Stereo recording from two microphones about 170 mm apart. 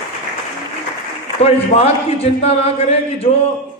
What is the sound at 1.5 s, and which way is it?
A man's voice, 35° left (ahead or behind).